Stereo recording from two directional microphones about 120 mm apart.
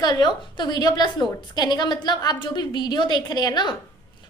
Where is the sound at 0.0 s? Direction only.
35° left (ahead or behind).